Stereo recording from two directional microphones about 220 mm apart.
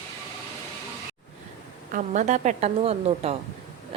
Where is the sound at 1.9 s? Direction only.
35° right (ahead or behind).